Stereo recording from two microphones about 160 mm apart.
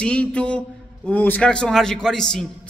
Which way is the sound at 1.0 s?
10° left (ahead or behind).